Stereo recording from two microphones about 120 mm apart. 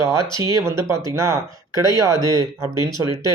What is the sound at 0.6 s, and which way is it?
Speech, 25° right (ahead or behind).